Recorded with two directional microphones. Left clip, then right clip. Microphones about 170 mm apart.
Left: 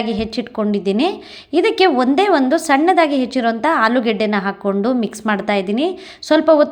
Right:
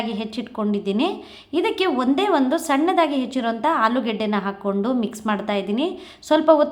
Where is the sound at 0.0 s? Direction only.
25° left (ahead or behind).